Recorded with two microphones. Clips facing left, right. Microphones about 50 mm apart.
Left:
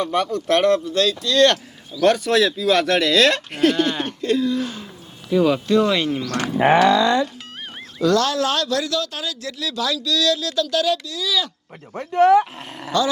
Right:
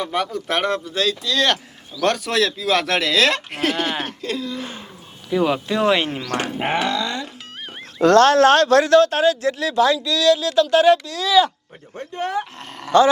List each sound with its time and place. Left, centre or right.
0.0 s speech: centre
4.6 s speech: right
5.8 s speech: right
6.3 s speech: right
8.0 s speech: right
11.9 s speech: left
12.9 s speech: right